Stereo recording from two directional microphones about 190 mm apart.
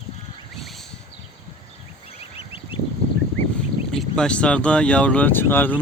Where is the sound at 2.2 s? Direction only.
30° left (ahead or behind).